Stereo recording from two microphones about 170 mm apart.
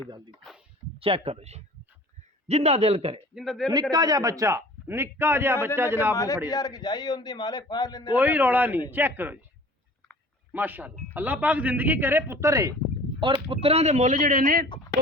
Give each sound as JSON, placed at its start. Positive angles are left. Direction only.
{"t": 0.9, "sound": "speech", "side_deg": -35}
{"t": 3.3, "sound": "a man's voice", "side_deg": 0}
{"t": 3.9, "sound": "a man's voice", "side_deg": -25}
{"t": 6.1, "sound": "a man's voice", "side_deg": 20}
{"t": 8.1, "sound": "a man's voice", "side_deg": -10}
{"t": 10.5, "sound": "a man's voice", "side_deg": -10}
{"t": 13.5, "sound": "speech", "side_deg": -35}